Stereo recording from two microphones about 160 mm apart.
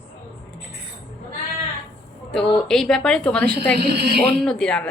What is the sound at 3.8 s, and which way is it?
Speech, 90° right.